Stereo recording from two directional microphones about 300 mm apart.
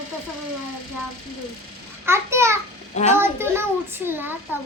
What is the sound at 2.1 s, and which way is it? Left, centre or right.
A child's voice, centre.